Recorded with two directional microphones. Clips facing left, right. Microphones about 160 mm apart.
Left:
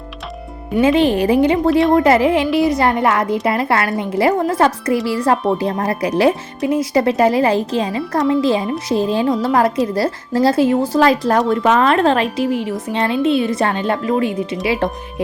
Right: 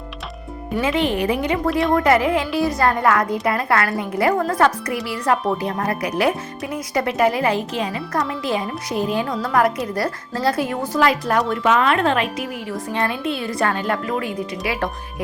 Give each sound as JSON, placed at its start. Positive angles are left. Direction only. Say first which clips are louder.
{"t": 0.8, "sound": "a woman's voice", "louder": "left 7 dB", "side_deg": 30}